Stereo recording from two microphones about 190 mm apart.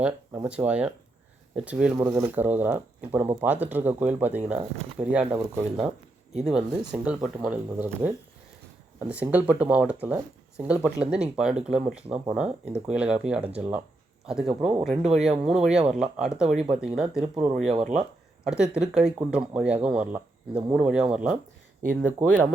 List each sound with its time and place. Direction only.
0.4 s speech: 5° right (ahead or behind)
2.0 s speech: 15° right (ahead or behind)
9.0 s speech: 5° right (ahead or behind)
17.6 s speech: 35° right (ahead or behind)
18.4 s speech: 5° right (ahead or behind)